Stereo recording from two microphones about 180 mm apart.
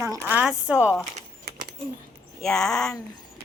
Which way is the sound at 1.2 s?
45° right (ahead or behind).